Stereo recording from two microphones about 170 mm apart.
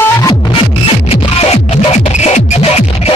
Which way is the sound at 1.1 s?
40° left (ahead or behind).